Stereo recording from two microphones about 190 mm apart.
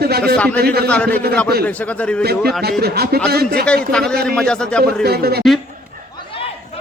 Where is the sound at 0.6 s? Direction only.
55° right (ahead or behind).